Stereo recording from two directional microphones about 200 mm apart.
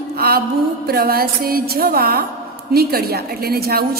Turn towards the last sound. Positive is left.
turn(degrees=-50)  # may be behind; listen again after turning